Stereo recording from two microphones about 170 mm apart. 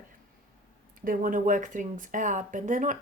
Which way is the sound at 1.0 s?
55° right (ahead or behind).